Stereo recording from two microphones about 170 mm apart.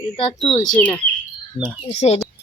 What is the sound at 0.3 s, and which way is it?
Speech, 30° left (ahead or behind).